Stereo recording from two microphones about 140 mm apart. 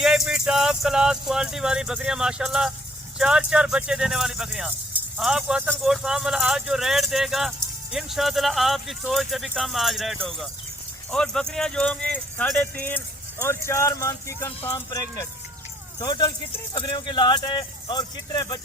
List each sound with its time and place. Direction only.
0.0 s speech: 5° right (ahead or behind); by 18.4 s 30° left (ahead or behind)